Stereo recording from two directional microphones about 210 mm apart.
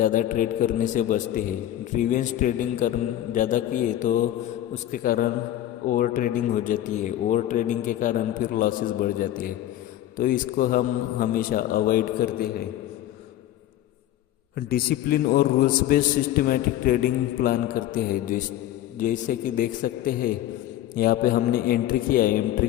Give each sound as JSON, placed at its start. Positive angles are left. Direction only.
{"t": 0.0, "sound": "speech", "side_deg": 40}
{"t": 14.5, "sound": "a man's voice", "side_deg": 45}